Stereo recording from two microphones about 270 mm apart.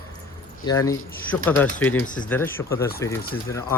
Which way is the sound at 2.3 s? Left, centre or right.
Centre.